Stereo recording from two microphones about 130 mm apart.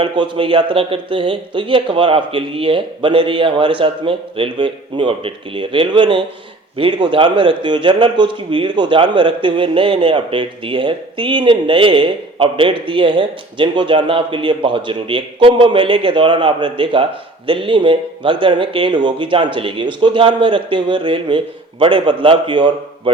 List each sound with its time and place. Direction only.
0.0 s a man's voice: 40° right (ahead or behind)